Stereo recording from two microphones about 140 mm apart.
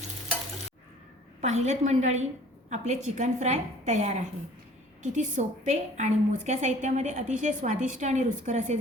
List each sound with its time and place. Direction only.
1.4 s a woman's voice: 55° right (ahead or behind)